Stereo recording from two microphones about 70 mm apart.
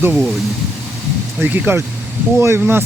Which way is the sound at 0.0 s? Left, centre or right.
Right.